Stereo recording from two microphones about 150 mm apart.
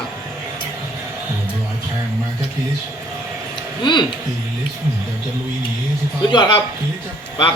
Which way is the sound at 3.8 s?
30° left (ahead or behind).